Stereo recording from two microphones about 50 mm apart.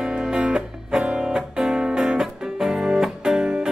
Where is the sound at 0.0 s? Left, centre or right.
Centre.